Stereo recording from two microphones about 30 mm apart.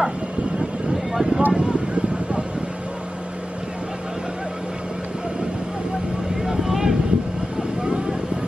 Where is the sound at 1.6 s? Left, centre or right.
Right.